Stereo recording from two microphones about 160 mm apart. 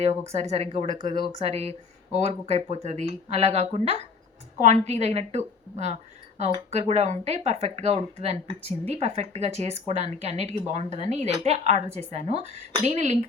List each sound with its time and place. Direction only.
0.0 s speech: 45° right (ahead or behind)